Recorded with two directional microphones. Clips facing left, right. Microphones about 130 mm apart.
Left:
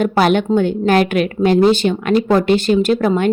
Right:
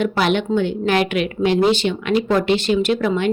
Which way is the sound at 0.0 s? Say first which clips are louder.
Left 4 dB; 45° left (ahead or behind).